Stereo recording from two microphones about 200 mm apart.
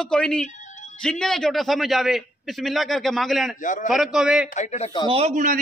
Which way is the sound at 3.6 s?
40° left (ahead or behind).